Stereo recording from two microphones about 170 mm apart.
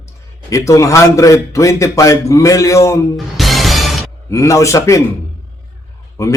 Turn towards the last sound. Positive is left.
turn(degrees=20)  # may be behind; listen again after turning